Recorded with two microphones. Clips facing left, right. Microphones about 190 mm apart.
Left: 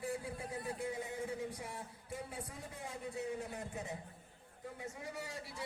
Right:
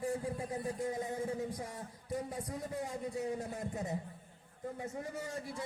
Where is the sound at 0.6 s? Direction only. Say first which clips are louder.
Right 3 dB; 40° right (ahead or behind).